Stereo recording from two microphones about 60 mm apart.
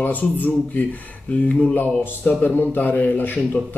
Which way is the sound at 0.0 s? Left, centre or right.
Left.